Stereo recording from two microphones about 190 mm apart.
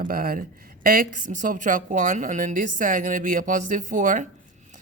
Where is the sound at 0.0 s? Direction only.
50° right (ahead or behind).